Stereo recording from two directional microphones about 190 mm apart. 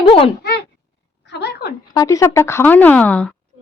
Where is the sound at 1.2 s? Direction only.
60° left (ahead or behind).